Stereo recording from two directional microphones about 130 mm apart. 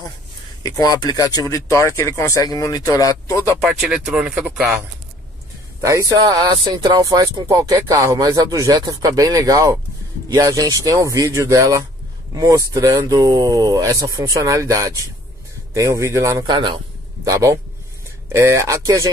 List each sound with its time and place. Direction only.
0.7 s speech: 30° left (ahead or behind)
3.6 s speech: 5° right (ahead or behind)
5.8 s speech: 25° right (ahead or behind)
16.4 s a man's voice: 40° right (ahead or behind)
17.2 s speech: 25° right (ahead or behind)